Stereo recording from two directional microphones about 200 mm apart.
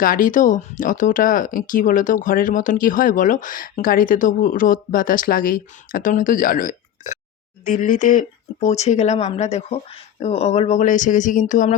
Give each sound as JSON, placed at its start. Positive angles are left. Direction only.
{"t": 0.0, "sound": "speech", "side_deg": 45}